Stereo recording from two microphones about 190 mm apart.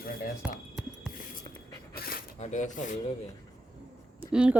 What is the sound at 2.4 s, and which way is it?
Speech, 40° left (ahead or behind).